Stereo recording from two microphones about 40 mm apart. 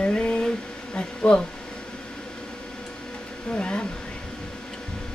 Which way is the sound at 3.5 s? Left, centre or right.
Left.